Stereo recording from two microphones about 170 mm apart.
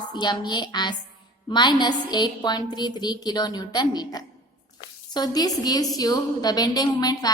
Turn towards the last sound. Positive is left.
turn(degrees=25)  # may be behind; listen again after turning